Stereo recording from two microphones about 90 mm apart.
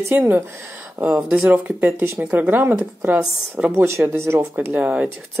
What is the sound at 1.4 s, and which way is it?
Speech, 20° right (ahead or behind).